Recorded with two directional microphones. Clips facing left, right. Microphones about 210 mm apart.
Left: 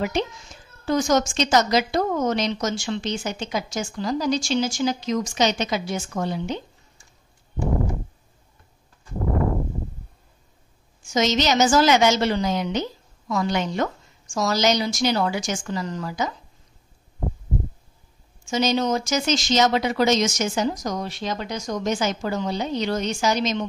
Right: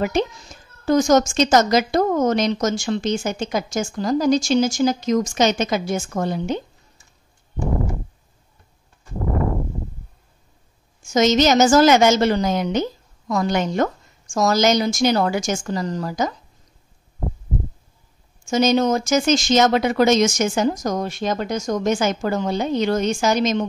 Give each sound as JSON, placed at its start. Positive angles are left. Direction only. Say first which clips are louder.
{"t": 0.0, "sound": "a woman's voice", "louder": "right 4 dB", "side_deg": -45}
{"t": 11.0, "sound": "a woman's voice", "louder": "right 5 dB", "side_deg": -45}
{"t": 18.5, "sound": "a woman's voice", "louder": "right 4 dB", "side_deg": -50}